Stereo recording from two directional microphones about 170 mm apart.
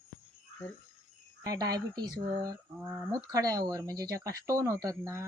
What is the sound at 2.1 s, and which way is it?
Speech, 60° right (ahead or behind).